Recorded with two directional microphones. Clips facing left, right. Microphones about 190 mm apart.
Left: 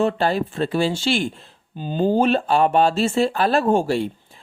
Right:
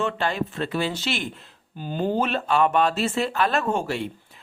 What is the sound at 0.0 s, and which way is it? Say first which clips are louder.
Speech: left 6 dB; 35° left (ahead or behind).